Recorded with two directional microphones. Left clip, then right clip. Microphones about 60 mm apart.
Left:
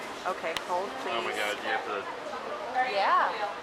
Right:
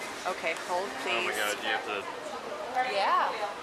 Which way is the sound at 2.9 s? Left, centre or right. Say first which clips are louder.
Left 2 dB; centre.